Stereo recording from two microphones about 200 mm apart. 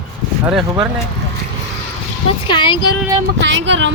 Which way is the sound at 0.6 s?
5° right (ahead or behind).